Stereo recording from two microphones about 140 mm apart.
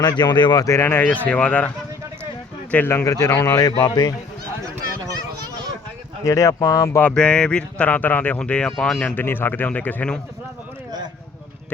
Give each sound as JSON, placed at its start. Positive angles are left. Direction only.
{"t": 0.0, "sound": "speech", "side_deg": 30}
{"t": 2.7, "sound": "speech", "side_deg": 15}
{"t": 3.7, "sound": "speech", "side_deg": 30}
{"t": 6.2, "sound": "speech", "side_deg": 25}
{"t": 7.0, "sound": "speech", "side_deg": 5}